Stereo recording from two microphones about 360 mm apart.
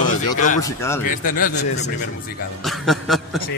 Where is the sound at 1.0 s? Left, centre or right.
Left.